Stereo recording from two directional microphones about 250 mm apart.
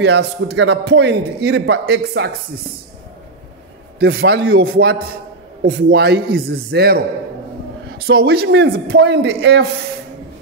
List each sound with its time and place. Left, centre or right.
0.0 s speech: right
4.0 s a man's voice: right
8.1 s a man's voice: right